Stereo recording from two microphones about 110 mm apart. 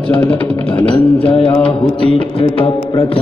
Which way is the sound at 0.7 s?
50° left (ahead or behind).